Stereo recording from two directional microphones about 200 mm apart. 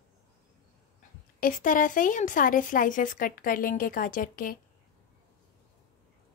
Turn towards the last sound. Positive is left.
turn(degrees=45)  # may be behind; listen again after turning